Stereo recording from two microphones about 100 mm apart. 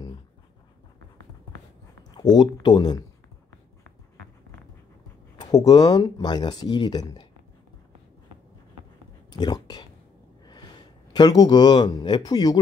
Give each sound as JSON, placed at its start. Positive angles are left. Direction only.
{"t": 2.0, "sound": "a sound", "side_deg": 45}
{"t": 2.6, "sound": "speech", "side_deg": 45}
{"t": 5.4, "sound": "speech", "side_deg": 40}
{"t": 9.3, "sound": "speech", "side_deg": 45}
{"t": 11.1, "sound": "speech", "side_deg": 45}